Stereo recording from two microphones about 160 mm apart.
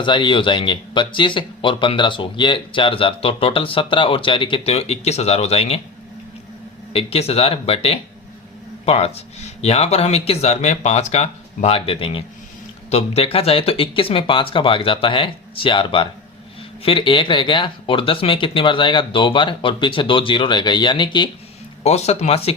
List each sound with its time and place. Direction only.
0.0 s speech: 30° left (ahead or behind)
6.9 s speech: 40° left (ahead or behind)
21.8 s speech: 40° left (ahead or behind)